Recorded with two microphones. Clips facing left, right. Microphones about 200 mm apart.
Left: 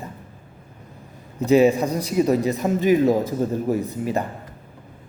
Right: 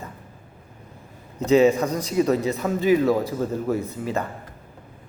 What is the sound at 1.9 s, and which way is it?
A man's voice, 10° left (ahead or behind).